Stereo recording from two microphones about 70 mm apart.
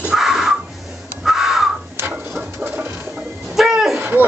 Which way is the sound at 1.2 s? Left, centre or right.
Centre.